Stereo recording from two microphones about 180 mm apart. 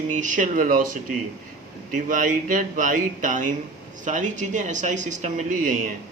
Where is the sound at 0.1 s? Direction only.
45° right (ahead or behind).